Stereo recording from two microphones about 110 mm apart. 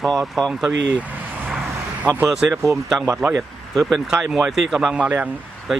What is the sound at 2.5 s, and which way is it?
Speech, 25° right (ahead or behind).